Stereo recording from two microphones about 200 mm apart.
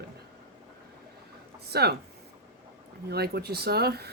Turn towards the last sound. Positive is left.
turn(degrees=-55)  # may be behind; listen again after turning